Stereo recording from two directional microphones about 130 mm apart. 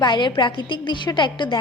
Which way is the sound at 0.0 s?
35° left (ahead or behind).